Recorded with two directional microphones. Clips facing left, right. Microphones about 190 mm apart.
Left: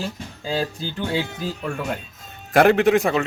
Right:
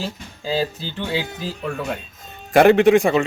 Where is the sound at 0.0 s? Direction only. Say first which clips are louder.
Right 1 dB; 5° right (ahead or behind).